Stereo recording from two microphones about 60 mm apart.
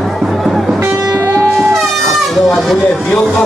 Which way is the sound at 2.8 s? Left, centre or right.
Centre.